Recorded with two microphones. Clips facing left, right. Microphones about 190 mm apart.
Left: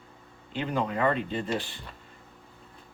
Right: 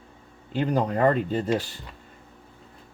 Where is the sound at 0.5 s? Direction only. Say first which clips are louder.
Right 5 dB; 40° right (ahead or behind).